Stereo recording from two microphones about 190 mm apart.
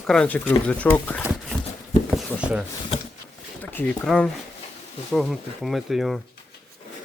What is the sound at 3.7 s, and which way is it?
Speech, 5° left (ahead or behind).